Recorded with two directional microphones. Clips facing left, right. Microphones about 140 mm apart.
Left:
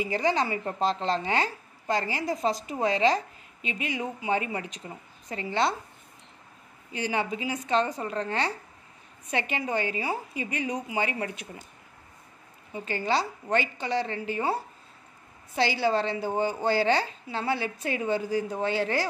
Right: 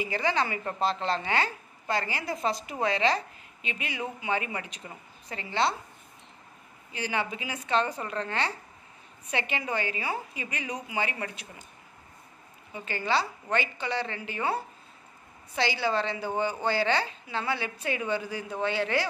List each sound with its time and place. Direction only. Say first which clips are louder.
0.0 s a woman's voice: left 2 dB; 40° left (ahead or behind)
1.9 s a woman's voice: left 3 dB; 40° left (ahead or behind)
7.1 s a woman's voice: left 3 dB; 40° left (ahead or behind)
12.8 s a woman's voice: left 1 dB; 45° left (ahead or behind)
15.5 s a woman's voice: left 3 dB; 45° left (ahead or behind)